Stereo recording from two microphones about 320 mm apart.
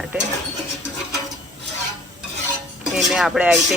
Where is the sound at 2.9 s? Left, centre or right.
Centre.